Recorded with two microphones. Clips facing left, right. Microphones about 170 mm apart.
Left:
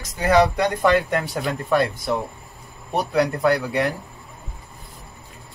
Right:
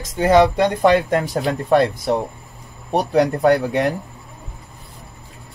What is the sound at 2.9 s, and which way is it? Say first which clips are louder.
Speech: right 4 dB; 30° right (ahead or behind).